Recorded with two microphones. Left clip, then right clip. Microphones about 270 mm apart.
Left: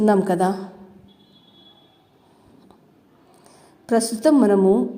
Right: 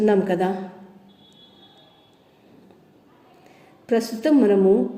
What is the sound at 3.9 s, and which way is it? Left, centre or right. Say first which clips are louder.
Speech: left 2 dB; left.